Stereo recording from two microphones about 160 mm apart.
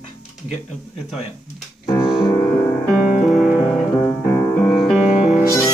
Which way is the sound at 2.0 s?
5° right (ahead or behind).